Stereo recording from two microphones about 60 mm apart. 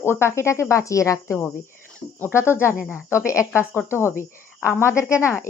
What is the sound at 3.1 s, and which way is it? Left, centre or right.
Speech, left.